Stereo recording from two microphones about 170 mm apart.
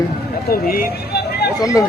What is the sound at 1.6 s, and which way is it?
Speech, 20° left (ahead or behind).